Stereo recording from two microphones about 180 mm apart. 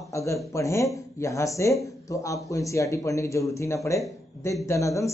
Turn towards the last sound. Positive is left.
turn(degrees=15)  # may be behind; listen again after turning